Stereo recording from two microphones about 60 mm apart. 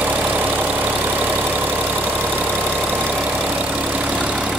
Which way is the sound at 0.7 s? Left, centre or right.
Right.